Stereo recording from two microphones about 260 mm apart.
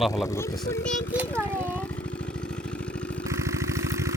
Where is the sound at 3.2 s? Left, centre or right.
Centre.